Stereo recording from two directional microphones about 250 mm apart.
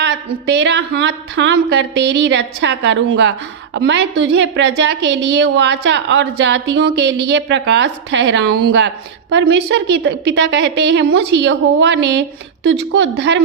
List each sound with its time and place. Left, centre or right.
0.0 s a woman's voice: right